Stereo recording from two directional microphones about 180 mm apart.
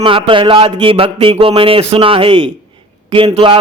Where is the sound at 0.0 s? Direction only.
30° right (ahead or behind).